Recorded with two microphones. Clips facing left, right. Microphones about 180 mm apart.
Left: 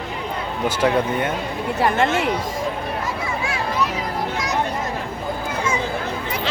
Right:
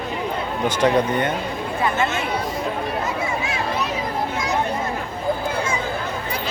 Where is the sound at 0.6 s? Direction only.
5° left (ahead or behind).